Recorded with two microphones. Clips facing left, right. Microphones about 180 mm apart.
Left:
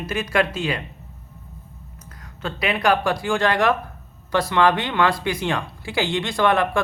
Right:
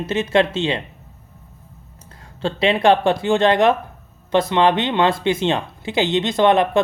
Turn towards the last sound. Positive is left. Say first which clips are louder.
# right 5 dB
turn(degrees=-20)  # may be behind; listen again after turning